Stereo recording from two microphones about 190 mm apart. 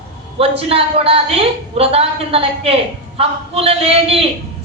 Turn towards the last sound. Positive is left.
turn(degrees=-30)  # may be behind; listen again after turning